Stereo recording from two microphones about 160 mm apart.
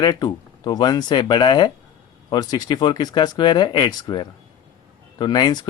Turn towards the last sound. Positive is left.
turn(degrees=25)  # may be behind; listen again after turning